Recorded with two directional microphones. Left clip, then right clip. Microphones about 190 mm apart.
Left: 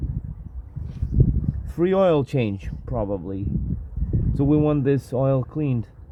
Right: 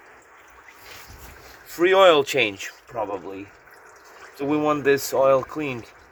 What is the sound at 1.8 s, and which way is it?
Speech, 30° left (ahead or behind).